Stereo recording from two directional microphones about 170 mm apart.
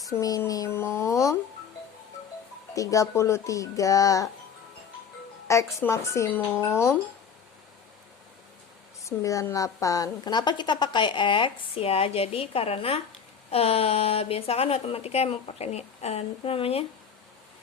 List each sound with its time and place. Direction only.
0.1 s a woman's voice: 20° left (ahead or behind)
2.7 s a woman's voice: 20° left (ahead or behind)
5.5 s speech: 15° left (ahead or behind)
9.0 s a woman's voice: 20° left (ahead or behind); by 16.8 s 35° left (ahead or behind)